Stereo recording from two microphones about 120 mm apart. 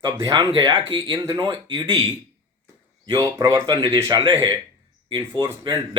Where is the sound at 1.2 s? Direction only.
30° right (ahead or behind).